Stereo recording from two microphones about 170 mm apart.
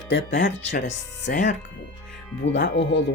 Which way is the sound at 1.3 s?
65° left (ahead or behind).